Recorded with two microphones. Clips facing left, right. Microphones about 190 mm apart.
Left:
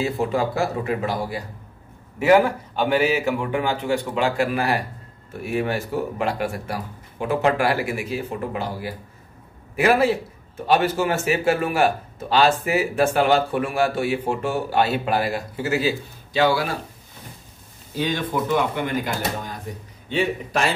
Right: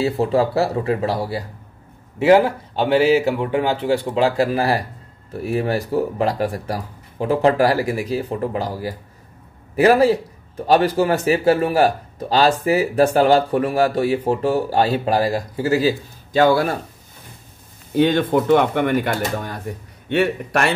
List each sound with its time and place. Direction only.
0.0 s a man's voice: 35° right (ahead or behind); by 16.7 s 50° right (ahead or behind)
17.9 s speech: 55° right (ahead or behind)